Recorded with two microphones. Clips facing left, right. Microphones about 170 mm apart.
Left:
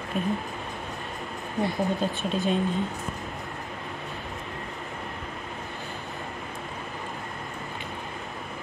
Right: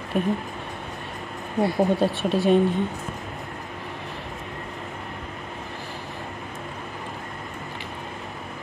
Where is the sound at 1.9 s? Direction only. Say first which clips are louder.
Right 5 dB; 70° right (ahead or behind).